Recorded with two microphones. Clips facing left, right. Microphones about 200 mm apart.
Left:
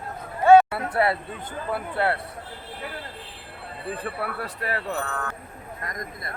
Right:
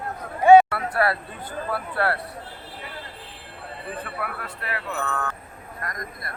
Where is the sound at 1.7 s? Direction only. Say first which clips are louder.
Left 1 dB; 20° left (ahead or behind).